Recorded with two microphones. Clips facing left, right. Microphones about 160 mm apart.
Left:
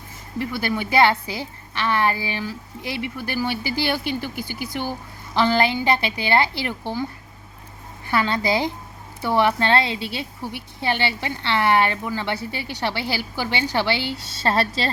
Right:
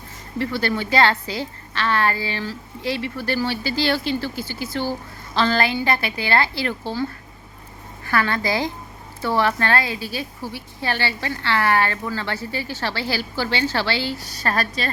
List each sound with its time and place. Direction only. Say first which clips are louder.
0.3 s a woman's voice: right 2 dB; 10° left (ahead or behind)